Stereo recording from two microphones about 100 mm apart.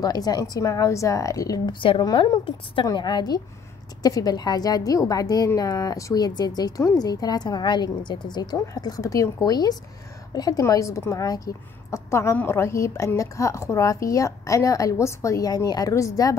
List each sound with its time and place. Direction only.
0.0 s a woman's voice: 40° left (ahead or behind)
1.7 s a woman's voice: 55° left (ahead or behind)
2.1 s a woman's voice: 45° left (ahead or behind)
2.4 s a woman's voice: 60° left (ahead or behind)
2.9 s a woman's voice: 45° left (ahead or behind)